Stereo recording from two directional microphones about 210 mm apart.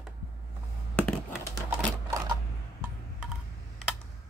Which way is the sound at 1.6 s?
15° right (ahead or behind).